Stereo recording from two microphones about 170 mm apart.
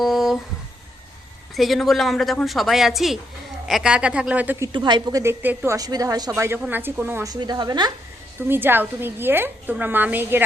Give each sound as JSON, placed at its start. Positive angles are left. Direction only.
{"t": 0.0, "sound": "a sound", "side_deg": 0}
{"t": 1.5, "sound": "a woman's voice", "side_deg": 0}
{"t": 4.7, "sound": "a woman's voice", "side_deg": -25}
{"t": 8.4, "sound": "a woman's voice", "side_deg": -10}